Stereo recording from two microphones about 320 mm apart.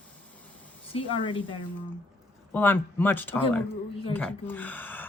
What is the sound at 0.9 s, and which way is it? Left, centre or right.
A woman's voice, centre.